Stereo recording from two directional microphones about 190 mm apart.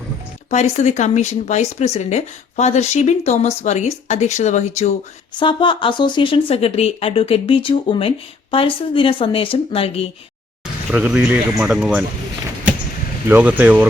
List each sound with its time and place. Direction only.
0.5 s speech: 35° left (ahead or behind)
5.4 s speech: 25° left (ahead or behind)
10.9 s speech: 5° right (ahead or behind)
13.2 s speech: 10° right (ahead or behind)